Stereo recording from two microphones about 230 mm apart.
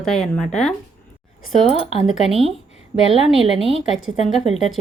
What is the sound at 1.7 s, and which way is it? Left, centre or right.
Speech, left.